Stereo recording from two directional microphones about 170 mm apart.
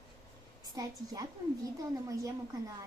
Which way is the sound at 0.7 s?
20° right (ahead or behind).